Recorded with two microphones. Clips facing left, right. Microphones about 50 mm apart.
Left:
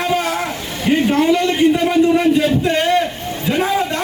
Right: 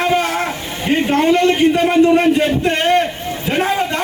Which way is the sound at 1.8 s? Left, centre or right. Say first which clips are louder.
Right 2 dB; right.